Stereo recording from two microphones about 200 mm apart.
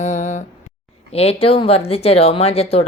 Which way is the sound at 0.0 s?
40° left (ahead or behind).